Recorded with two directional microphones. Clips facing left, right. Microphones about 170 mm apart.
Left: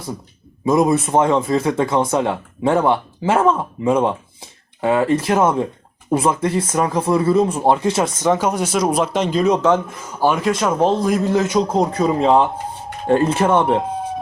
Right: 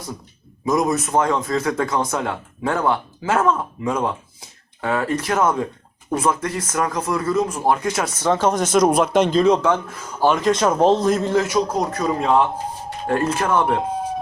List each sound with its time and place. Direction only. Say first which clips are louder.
0.6 s speech: left 4 dB; 25° left (ahead or behind)
8.2 s speech: right 2 dB; 15° left (ahead or behind)
9.6 s speech: left 4 dB; 20° left (ahead or behind)
11.7 s speech: left 4 dB; 25° left (ahead or behind)
13.8 s a sound: even; centre (ahead or behind)